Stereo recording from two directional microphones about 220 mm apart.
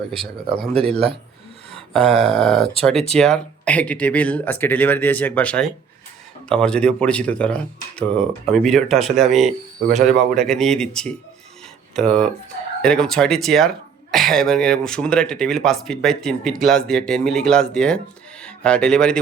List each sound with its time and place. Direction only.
0.7 s speech: 25° right (ahead or behind)
1.9 s speech: centre (ahead or behind)